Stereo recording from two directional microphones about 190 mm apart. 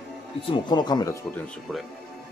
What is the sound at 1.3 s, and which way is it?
Speech, 5° left (ahead or behind).